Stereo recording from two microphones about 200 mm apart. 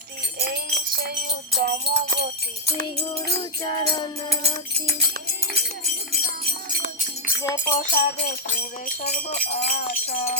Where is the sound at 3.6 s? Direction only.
20° left (ahead or behind).